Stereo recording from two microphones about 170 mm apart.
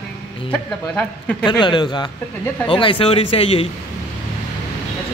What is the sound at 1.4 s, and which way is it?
A man's voice, 25° left (ahead or behind).